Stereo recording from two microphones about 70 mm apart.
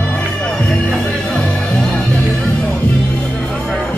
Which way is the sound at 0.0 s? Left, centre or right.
Centre.